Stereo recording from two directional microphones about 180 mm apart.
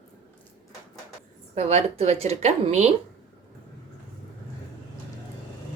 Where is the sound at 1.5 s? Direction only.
35° right (ahead or behind).